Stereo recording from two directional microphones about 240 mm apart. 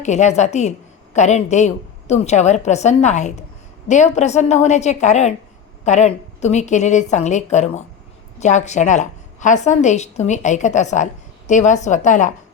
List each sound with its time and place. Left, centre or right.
0.0 s a woman's voice: left